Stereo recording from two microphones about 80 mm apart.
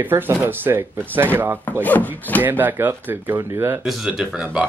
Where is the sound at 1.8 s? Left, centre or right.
Left.